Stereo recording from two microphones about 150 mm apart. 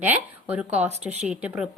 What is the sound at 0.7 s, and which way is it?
Speech, 45° right (ahead or behind).